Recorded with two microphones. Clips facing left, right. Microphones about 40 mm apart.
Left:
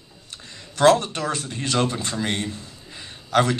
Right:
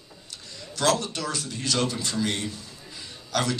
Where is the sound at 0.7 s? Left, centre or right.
Left.